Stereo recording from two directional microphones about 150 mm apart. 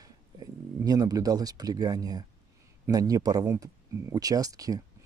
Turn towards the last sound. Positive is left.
turn(degrees=-25)  # may be behind; listen again after turning